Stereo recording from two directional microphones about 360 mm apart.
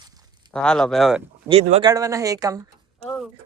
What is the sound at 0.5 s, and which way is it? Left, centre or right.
Speech, centre.